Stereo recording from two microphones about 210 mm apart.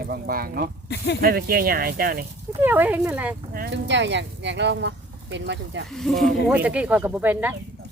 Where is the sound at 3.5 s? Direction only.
55° right (ahead or behind).